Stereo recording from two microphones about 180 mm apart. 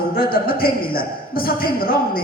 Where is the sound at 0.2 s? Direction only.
55° left (ahead or behind).